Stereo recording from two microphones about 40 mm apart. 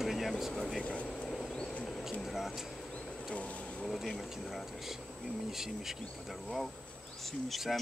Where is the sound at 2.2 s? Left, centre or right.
Centre.